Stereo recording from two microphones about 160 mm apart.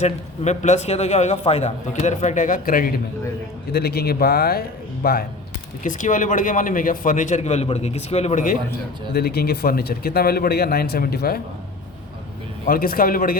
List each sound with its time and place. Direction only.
0.0 s a man's voice: 45° left (ahead or behind); by 2.9 s 60° left (ahead or behind)
3.7 s speech: 80° left
5.8 s a man's voice: 55° left (ahead or behind)
9.1 s speech: 75° left (ahead or behind)
12.6 s speech: 65° left (ahead or behind)